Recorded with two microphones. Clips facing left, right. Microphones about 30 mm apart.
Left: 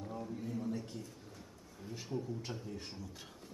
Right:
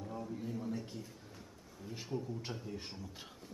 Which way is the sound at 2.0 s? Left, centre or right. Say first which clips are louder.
Even; centre.